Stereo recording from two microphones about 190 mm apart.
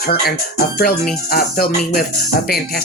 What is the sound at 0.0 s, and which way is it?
Speech, 50° left (ahead or behind).